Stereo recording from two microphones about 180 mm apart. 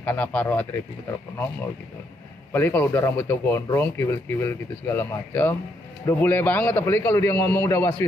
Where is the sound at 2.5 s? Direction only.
10° left (ahead or behind).